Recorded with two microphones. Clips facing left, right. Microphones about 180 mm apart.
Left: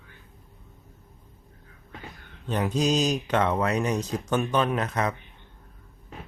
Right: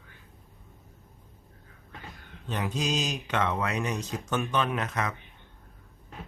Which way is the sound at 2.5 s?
40° left (ahead or behind).